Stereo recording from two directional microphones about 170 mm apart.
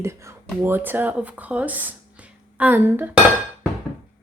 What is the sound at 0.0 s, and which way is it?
Speech, 15° right (ahead or behind).